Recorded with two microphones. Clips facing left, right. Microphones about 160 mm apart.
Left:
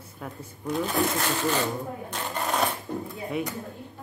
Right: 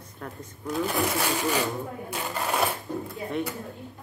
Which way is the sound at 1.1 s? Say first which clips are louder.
Even; 10° right (ahead or behind).